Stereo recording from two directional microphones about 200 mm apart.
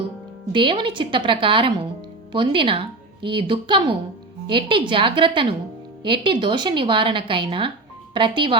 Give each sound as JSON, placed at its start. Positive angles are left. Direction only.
{"t": 0.5, "sound": "speech", "side_deg": -25}